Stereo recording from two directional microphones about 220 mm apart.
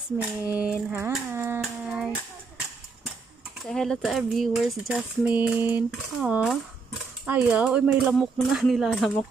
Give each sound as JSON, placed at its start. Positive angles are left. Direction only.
{"t": 0.2, "sound": "speech", "side_deg": -5}
{"t": 1.1, "sound": "a sound", "side_deg": -10}
{"t": 3.6, "sound": "speech", "side_deg": 0}